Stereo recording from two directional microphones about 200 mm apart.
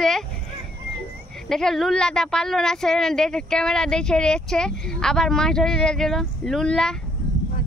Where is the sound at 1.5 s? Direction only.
Centre (ahead or behind).